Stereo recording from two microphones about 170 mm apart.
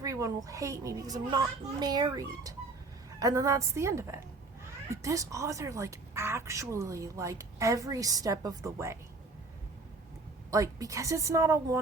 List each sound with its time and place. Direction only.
0.0 s a woman's voice: 20° right (ahead or behind)
10.5 s a woman's voice: 20° right (ahead or behind)